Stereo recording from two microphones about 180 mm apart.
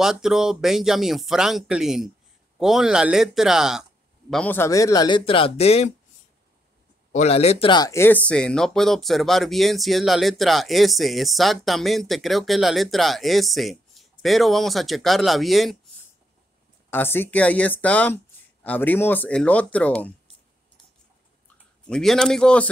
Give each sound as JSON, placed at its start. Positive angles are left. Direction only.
{"t": 0.0, "sound": "speech", "side_deg": 0}
{"t": 4.3, "sound": "a man's voice", "side_deg": 10}
{"t": 7.1, "sound": "speech", "side_deg": 35}
{"t": 16.9, "sound": "speech", "side_deg": 10}
{"t": 21.8, "sound": "speech", "side_deg": 5}